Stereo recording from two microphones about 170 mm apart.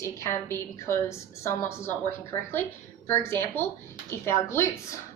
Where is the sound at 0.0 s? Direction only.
15° left (ahead or behind).